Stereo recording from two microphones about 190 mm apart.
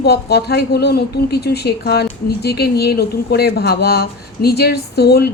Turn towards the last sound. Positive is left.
turn(degrees=60)  # may be behind; listen again after turning